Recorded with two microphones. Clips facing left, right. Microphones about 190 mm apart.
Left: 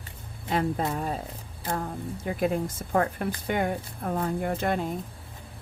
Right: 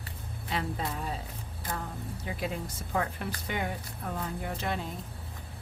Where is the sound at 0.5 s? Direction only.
45° left (ahead or behind).